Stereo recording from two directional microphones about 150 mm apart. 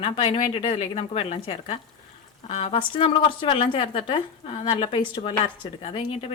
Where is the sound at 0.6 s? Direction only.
45° left (ahead or behind).